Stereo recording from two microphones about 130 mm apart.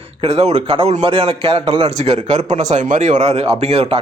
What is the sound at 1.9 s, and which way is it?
Speech, 60° right (ahead or behind).